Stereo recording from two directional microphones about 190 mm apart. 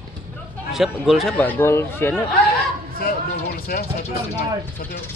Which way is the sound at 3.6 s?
55° left (ahead or behind).